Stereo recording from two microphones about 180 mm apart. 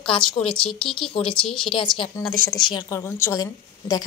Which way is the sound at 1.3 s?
5° left (ahead or behind).